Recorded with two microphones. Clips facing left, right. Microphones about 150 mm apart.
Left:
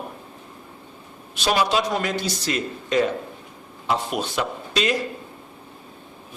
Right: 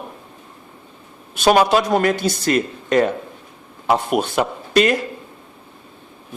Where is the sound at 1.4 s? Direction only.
55° right (ahead or behind).